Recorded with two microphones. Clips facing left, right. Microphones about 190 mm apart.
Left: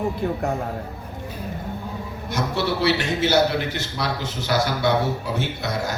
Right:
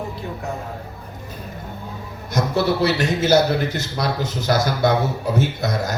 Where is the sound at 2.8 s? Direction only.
40° right (ahead or behind).